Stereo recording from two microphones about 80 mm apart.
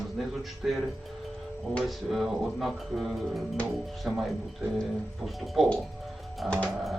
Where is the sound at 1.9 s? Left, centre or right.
Centre.